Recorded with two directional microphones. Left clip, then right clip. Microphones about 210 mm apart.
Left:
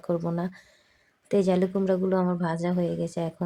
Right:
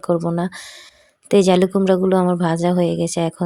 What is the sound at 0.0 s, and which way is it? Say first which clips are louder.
Speech: right 9 dB; 35° right (ahead or behind).